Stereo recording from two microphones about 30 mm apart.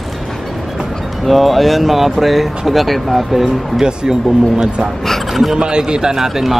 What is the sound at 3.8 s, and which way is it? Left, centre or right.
Speech, right.